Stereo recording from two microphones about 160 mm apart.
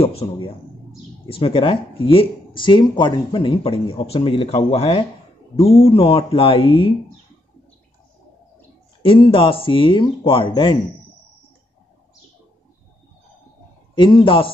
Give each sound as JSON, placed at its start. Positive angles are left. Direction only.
{"t": 0.0, "sound": "speech", "side_deg": 35}
{"t": 9.0, "sound": "speech", "side_deg": 35}
{"t": 13.9, "sound": "speech", "side_deg": 30}